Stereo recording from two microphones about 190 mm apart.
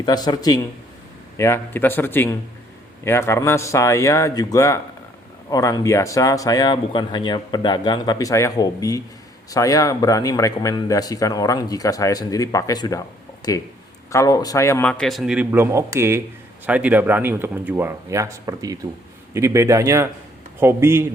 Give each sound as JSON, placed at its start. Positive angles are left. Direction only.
{"t": 0.0, "sound": "a man's voice", "side_deg": 20}